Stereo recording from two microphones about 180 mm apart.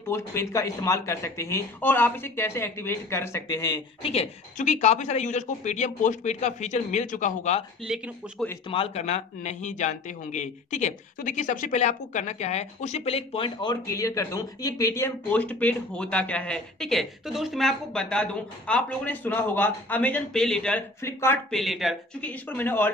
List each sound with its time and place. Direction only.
0.1 s a man's voice: 15° left (ahead or behind)
4.0 s speech: 35° left (ahead or behind)
7.8 s speech: centre (ahead or behind)
8.6 s a man's voice: 30° left (ahead or behind); by 21.4 s 15° left (ahead or behind)
21.5 s speech: centre (ahead or behind)